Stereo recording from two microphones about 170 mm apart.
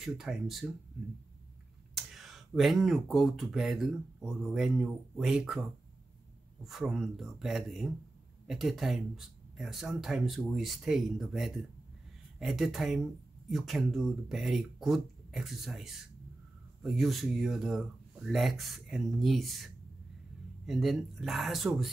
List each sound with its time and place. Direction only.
0.0 s speech: centre (ahead or behind)
2.0 s speech: centre (ahead or behind)